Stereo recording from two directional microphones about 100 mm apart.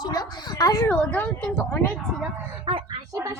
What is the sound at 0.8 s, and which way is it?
Speech, 15° left (ahead or behind).